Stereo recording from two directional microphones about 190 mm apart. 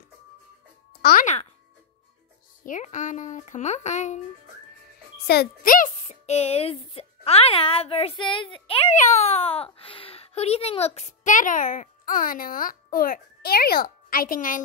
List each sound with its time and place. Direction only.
1.0 s speech: 45° left (ahead or behind)
2.6 s a woman's voice: 40° left (ahead or behind)
5.2 s a woman's voice: 55° left (ahead or behind)